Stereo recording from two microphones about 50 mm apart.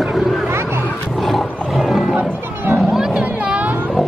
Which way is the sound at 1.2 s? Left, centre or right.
Centre.